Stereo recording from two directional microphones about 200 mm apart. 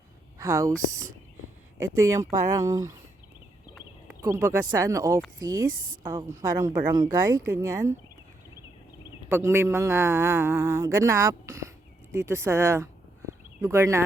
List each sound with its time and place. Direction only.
0.3 s speech: 15° right (ahead or behind)
2.6 s a man's voice: 15° right (ahead or behind)
4.1 s a man's voice: 15° right (ahead or behind)
5.7 s a woman's voice: 45° right (ahead or behind)
6.0 s a man's voice: 20° right (ahead or behind)
9.0 s a man's voice: 10° right (ahead or behind)